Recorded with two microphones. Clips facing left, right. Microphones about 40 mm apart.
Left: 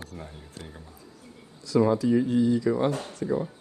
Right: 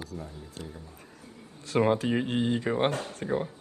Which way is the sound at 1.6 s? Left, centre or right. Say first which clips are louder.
Left 3 dB; right.